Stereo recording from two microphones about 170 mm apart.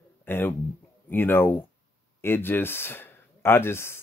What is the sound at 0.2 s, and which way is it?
Speech, 10° left (ahead or behind).